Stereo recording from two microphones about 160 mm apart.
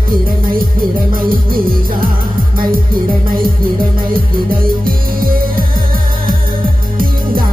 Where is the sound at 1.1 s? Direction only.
65° right (ahead or behind).